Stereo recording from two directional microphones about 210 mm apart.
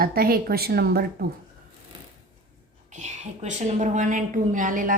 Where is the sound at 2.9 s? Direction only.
35° right (ahead or behind).